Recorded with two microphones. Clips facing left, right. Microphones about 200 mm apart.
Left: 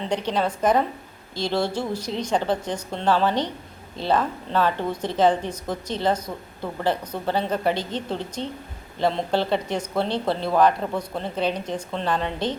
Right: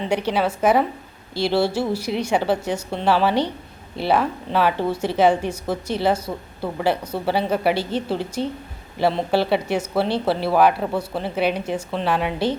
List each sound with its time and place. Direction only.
0.0 s speech: 10° right (ahead or behind)